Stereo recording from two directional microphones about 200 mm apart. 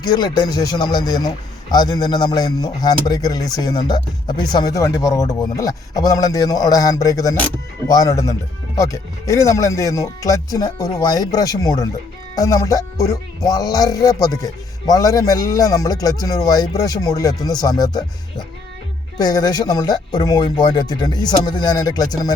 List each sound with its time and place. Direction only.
0.0 s a man's voice: 20° left (ahead or behind)